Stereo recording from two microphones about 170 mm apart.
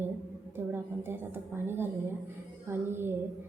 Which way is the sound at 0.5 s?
15° right (ahead or behind).